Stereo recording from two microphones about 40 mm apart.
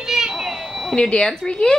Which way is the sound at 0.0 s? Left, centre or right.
Centre.